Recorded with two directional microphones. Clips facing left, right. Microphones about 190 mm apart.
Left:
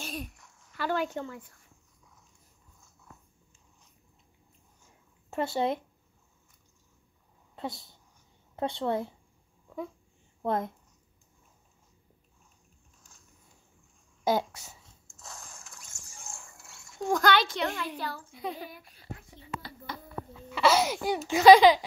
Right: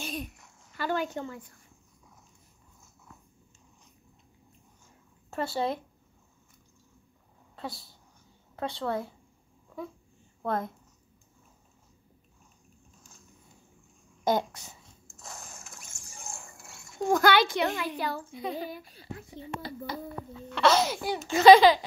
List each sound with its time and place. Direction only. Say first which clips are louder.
0.0 s a sound: right 2 dB; centre (ahead or behind)
0.8 s speech: even; centre (ahead or behind)
5.3 s speech: left 1 dB; 20° left (ahead or behind)
7.5 s a woman's voice: left 2 dB; 20° left (ahead or behind)
10.4 s speech: left 1 dB; 20° left (ahead or behind)
14.2 s a sound: even; 5° left (ahead or behind)
15.1 s a sound: right 2 dB; 20° right (ahead or behind)
16.1 s liquid: right 3 dB; 10° right (ahead or behind)
16.6 s a child's voice: right 3 dB; 10° right (ahead or behind)
18.3 s speech: right 3 dB; 5° left (ahead or behind)
18.7 s a sound: right 4 dB; 30° right (ahead or behind)
20.4 s speech: right 1 dB; 5° left (ahead or behind)